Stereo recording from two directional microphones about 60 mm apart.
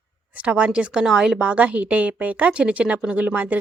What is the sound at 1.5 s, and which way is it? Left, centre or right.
A woman's voice, right.